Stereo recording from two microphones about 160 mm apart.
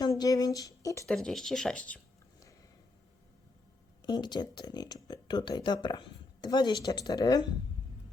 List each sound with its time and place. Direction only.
0.0 s speech: 25° left (ahead or behind)
1.0 s speech: centre (ahead or behind)
4.0 s speech: 25° left (ahead or behind)